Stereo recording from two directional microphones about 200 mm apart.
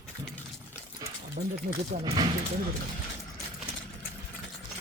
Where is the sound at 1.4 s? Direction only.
40° right (ahead or behind).